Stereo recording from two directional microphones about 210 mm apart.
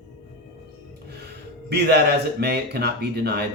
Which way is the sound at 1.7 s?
50° right (ahead or behind).